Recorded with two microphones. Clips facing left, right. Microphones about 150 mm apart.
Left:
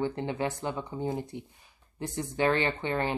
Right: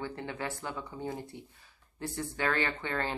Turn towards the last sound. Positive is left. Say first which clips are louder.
# left 5 dB
turn(degrees=20)  # may be behind; listen again after turning